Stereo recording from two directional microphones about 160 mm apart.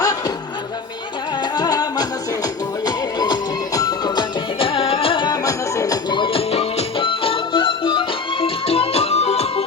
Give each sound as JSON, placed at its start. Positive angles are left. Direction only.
{"t": 0.0, "sound": "music", "side_deg": 20}
{"t": 1.4, "sound": "music", "side_deg": 25}